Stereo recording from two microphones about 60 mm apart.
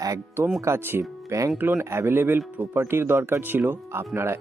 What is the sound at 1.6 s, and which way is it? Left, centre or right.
Speech, right.